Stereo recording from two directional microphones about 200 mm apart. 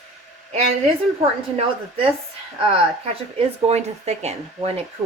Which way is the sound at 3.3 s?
35° right (ahead or behind).